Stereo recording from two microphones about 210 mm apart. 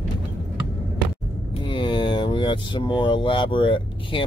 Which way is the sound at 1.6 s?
20° left (ahead or behind).